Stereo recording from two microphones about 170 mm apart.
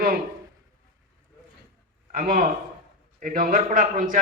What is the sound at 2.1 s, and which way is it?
A man's voice, 55° right (ahead or behind).